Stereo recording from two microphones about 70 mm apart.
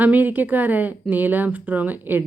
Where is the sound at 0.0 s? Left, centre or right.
Right.